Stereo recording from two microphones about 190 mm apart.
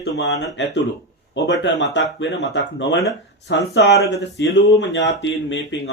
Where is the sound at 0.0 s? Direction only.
65° left (ahead or behind).